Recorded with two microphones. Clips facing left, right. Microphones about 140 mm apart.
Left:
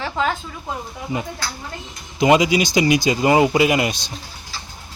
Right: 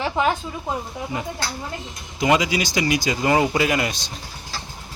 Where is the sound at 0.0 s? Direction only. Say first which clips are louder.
Right 1 dB; 15° right (ahead or behind).